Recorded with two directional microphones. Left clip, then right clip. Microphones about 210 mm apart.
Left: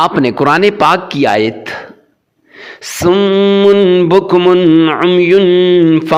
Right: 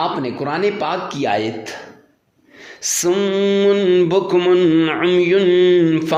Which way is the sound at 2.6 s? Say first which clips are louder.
Left 6 dB; 35° left (ahead or behind).